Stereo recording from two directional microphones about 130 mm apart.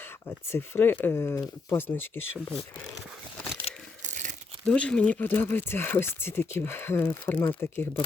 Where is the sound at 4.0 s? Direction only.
70° right (ahead or behind).